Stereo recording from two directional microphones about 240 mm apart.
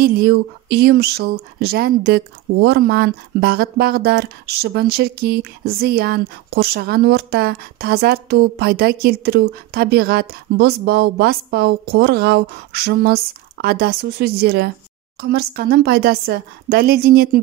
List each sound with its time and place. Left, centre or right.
0.0 s speech: right